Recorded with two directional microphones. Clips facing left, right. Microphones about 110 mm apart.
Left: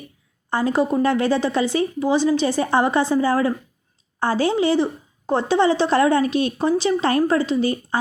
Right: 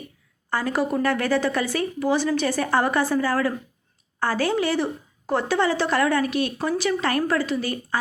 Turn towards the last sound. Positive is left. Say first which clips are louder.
# left 5 dB
turn(degrees=25)  # may be behind; listen again after turning